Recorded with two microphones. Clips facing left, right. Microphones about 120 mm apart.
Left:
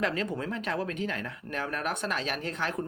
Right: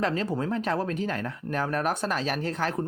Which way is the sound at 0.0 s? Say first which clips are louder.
Right 3 dB; 35° right (ahead or behind).